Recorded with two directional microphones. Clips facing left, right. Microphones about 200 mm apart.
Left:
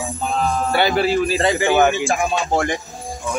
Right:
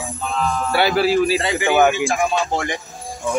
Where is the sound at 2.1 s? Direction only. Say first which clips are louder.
Left 1 dB; 35° left (ahead or behind).